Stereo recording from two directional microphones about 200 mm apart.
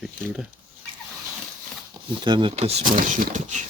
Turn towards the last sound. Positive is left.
turn(degrees=-40)  # may be behind; listen again after turning